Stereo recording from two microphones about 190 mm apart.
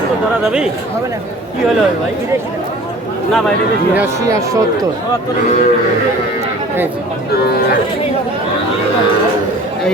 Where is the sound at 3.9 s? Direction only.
15° right (ahead or behind).